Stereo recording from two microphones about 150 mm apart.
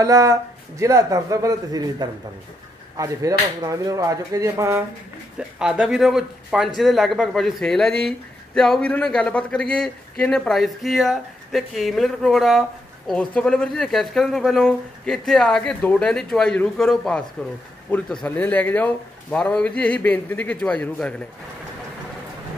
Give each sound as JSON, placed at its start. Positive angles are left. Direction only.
{"t": 0.0, "sound": "a man's voice", "side_deg": -20}
{"t": 5.6, "sound": "a man's voice", "side_deg": -5}